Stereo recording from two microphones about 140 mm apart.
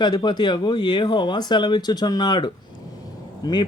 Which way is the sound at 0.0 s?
30° left (ahead or behind).